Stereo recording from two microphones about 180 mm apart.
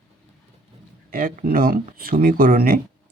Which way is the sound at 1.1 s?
50° right (ahead or behind).